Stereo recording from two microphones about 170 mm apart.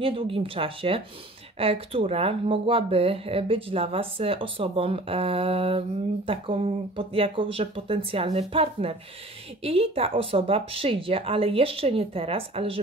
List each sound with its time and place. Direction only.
0.0 s speech: 30° right (ahead or behind)